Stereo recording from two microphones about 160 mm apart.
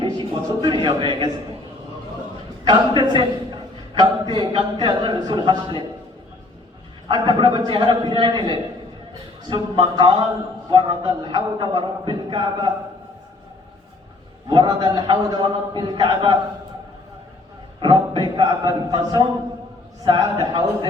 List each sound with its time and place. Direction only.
0.0 s a sound: 30° right (ahead or behind)
0.8 s a man's voice: 30° right (ahead or behind)
2.6 s a man's voice: 30° right (ahead or behind)
7.1 s a man's voice: 30° right (ahead or behind)
14.5 s a man's voice: 30° right (ahead or behind)
17.7 s a man's voice: 30° right (ahead or behind)